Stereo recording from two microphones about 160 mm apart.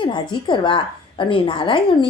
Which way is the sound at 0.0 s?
30° left (ahead or behind).